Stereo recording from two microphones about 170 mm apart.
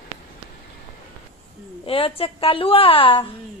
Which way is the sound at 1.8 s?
35° left (ahead or behind).